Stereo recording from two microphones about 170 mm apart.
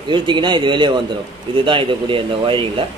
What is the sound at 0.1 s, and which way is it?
Speech, 25° right (ahead or behind).